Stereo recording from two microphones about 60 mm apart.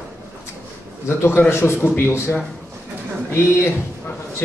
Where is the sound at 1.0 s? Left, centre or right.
Left.